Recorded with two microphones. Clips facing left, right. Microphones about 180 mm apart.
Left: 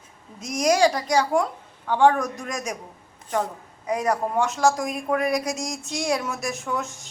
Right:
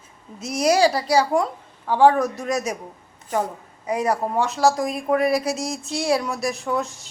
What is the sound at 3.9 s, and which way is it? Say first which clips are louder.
A woman's voice: right 1 dB; 10° right (ahead or behind).